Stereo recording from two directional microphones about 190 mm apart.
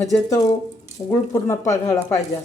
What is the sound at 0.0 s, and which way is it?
Speech, 15° left (ahead or behind).